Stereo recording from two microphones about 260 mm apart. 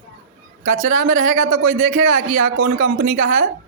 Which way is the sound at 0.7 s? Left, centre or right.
Right.